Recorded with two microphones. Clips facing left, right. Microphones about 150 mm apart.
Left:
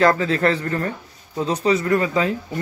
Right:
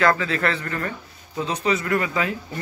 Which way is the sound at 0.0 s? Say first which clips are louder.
Left 4 dB; 35° left (ahead or behind).